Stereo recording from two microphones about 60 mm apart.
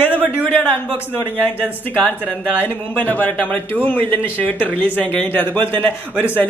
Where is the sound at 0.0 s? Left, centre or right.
Left.